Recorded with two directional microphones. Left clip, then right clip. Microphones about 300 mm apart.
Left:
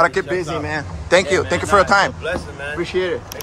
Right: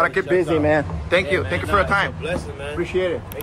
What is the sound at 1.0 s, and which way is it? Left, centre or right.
Speech, centre.